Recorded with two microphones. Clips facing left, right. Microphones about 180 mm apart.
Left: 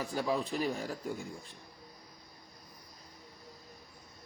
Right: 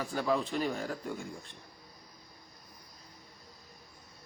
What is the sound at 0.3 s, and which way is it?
Speech, 5° left (ahead or behind).